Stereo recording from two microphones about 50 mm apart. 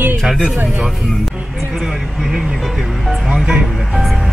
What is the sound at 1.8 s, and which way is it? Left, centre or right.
Speech, centre.